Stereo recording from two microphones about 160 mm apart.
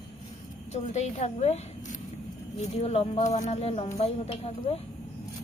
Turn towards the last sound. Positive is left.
turn(degrees=40)  # may be behind; listen again after turning